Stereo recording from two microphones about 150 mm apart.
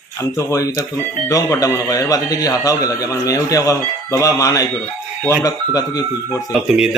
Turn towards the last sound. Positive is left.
turn(degrees=-5)  # may be behind; listen again after turning